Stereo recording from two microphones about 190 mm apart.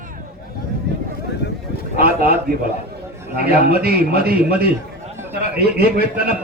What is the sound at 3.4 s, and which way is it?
A man's voice, 55° right (ahead or behind).